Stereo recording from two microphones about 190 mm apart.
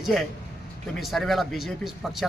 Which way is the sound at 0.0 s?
Centre (ahead or behind).